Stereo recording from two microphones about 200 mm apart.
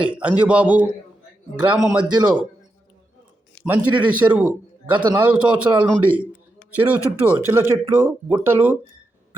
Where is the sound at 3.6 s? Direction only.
10° right (ahead or behind).